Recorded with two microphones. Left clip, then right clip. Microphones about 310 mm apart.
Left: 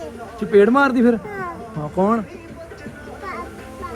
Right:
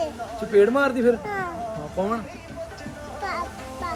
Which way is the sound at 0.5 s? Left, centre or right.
Centre.